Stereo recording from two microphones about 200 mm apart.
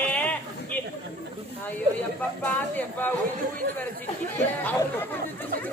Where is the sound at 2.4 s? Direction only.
10° left (ahead or behind).